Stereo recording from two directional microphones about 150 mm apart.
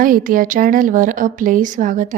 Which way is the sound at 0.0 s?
65° right (ahead or behind).